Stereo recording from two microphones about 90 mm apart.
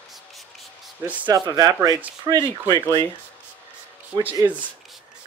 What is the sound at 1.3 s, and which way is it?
Speech, 50° right (ahead or behind).